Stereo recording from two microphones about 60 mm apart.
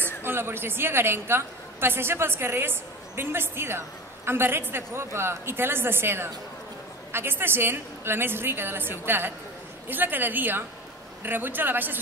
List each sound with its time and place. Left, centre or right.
0.2 s a woman's voice: right